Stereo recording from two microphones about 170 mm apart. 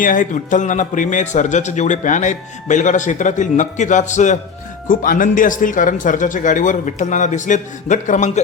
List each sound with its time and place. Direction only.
0.0 s a man's voice: 50° left (ahead or behind)